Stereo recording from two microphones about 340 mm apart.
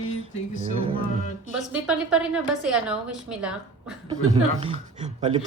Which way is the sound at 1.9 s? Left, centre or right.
Centre.